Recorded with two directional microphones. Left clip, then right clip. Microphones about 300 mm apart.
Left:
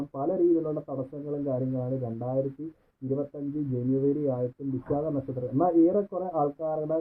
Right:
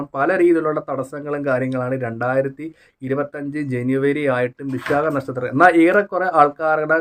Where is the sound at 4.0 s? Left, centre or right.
Right.